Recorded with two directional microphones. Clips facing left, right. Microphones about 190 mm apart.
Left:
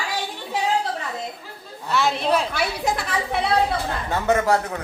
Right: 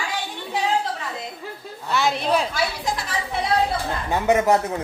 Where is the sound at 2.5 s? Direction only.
60° left (ahead or behind).